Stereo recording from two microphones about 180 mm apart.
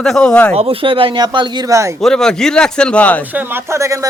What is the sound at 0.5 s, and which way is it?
Speech, 30° right (ahead or behind).